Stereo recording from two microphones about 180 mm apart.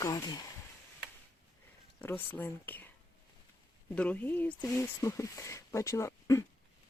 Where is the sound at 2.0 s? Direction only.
10° left (ahead or behind).